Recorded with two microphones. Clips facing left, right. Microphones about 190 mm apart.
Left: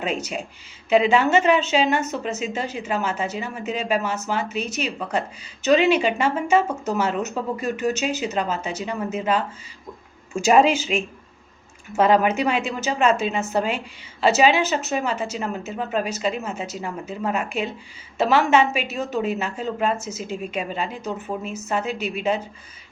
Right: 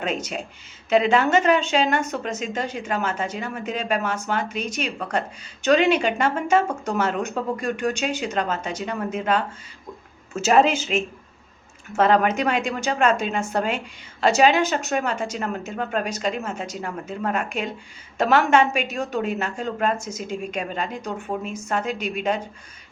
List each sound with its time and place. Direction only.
0.0 s a woman's voice: 10° left (ahead or behind)
11.9 s a woman's voice: 10° left (ahead or behind)